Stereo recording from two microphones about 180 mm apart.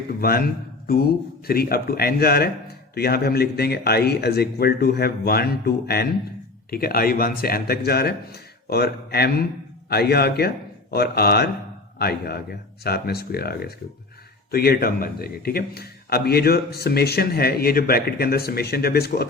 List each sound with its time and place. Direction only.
0.2 s speech: 55° left (ahead or behind)